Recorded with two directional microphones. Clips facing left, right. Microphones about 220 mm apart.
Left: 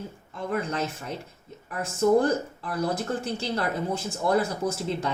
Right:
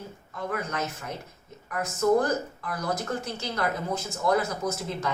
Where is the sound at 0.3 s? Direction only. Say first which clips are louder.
Left 3 dB; 30° left (ahead or behind).